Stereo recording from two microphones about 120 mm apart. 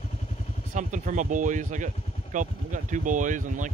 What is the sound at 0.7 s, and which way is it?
Speech, 90° right.